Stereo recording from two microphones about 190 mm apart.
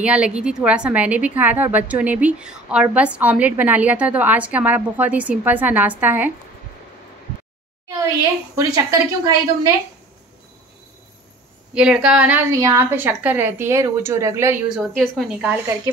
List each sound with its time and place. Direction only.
0.0 s a woman's voice: 5° right (ahead or behind)
8.5 s a woman's voice: 15° right (ahead or behind)
11.7 s a woman's voice: 5° right (ahead or behind)
14.7 s speech: centre (ahead or behind)